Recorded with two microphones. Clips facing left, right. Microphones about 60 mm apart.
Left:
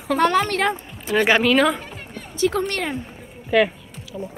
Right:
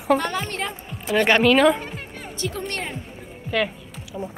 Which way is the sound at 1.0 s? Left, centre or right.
Centre.